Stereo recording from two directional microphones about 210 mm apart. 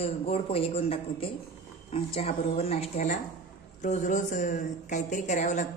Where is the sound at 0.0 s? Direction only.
30° left (ahead or behind).